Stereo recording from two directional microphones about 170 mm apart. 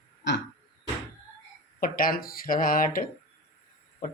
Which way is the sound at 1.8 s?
55° left (ahead or behind).